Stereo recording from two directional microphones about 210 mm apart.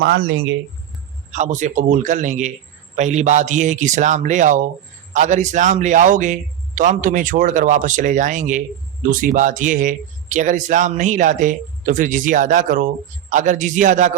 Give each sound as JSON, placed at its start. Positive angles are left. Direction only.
{"t": 0.0, "sound": "speech", "side_deg": -50}
{"t": 1.3, "sound": "speech", "side_deg": -35}